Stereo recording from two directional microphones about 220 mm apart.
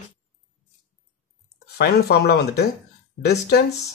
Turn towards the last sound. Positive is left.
turn(degrees=45)  # may be behind; listen again after turning